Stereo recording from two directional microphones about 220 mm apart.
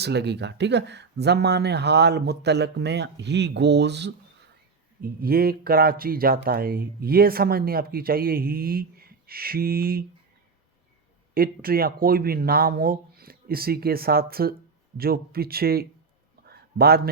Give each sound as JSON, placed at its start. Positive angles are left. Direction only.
{"t": 0.0, "sound": "speech", "side_deg": -50}
{"t": 11.3, "sound": "speech", "side_deg": -40}
{"t": 16.5, "sound": "a sound", "side_deg": -45}